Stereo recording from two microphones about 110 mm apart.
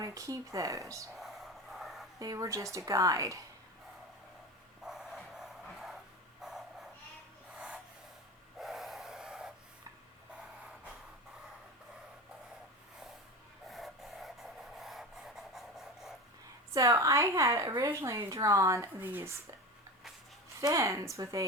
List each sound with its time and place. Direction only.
0.0 s a woman's voice: 30° right (ahead or behind)
1.1 s vehicle: centre (ahead or behind)
2.1 s a woman's voice: 30° right (ahead or behind)
4.9 s music: centre (ahead or behind)
6.4 s dog: 5° right (ahead or behind)
8.5 s snort: centre (ahead or behind)
13.7 s printer: centre (ahead or behind)
16.7 s a woman's voice: 30° right (ahead or behind)
20.6 s a woman's voice: 30° right (ahead or behind)